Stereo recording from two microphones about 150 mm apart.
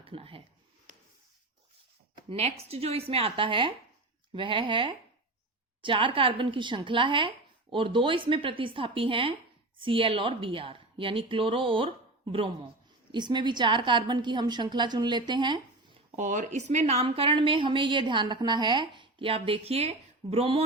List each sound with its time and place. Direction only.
0.0 s speech: 40° right (ahead or behind)
2.3 s a woman's voice: 45° right (ahead or behind)
16.1 s a woman's voice: 55° right (ahead or behind)